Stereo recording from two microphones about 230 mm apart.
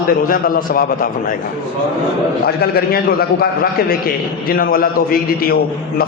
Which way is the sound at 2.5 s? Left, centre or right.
Left.